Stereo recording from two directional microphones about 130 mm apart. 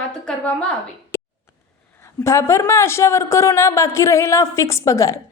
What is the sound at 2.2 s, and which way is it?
A woman's voice, 20° left (ahead or behind).